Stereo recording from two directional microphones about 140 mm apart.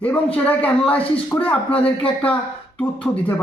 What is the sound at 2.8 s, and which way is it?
Speech, 10° left (ahead or behind).